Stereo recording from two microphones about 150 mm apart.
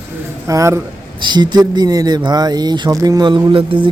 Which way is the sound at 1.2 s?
30° right (ahead or behind).